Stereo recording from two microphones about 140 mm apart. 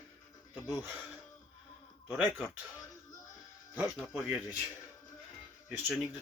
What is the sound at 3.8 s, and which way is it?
Speech, 5° right (ahead or behind).